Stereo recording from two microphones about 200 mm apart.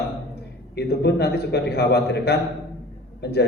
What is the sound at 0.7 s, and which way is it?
A man's voice, 55° left (ahead or behind).